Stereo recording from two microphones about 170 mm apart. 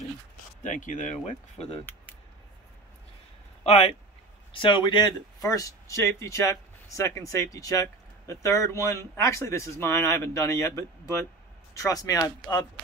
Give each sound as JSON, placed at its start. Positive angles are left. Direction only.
{"t": 0.7, "sound": "speech", "side_deg": 50}
{"t": 3.6, "sound": "speech", "side_deg": 35}